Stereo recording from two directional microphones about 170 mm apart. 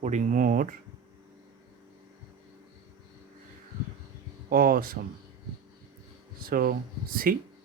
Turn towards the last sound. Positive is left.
turn(degrees=-60)  # may be behind; listen again after turning